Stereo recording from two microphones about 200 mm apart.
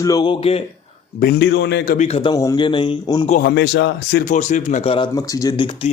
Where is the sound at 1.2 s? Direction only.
55° left (ahead or behind).